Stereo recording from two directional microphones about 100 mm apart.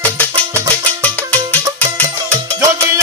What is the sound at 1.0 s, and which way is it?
Music, 15° left (ahead or behind).